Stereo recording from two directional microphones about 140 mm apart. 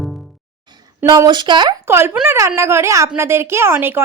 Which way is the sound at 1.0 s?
30° right (ahead or behind).